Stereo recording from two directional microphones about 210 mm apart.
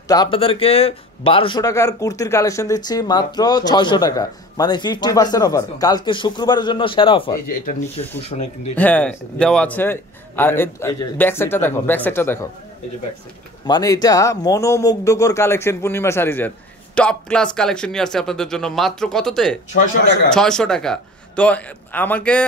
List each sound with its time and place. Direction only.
0.1 s speech: 20° left (ahead or behind)
8.3 s speech: 40° left (ahead or behind)
8.7 s speech: 5° left (ahead or behind)
13.7 s speech: 20° left (ahead or behind)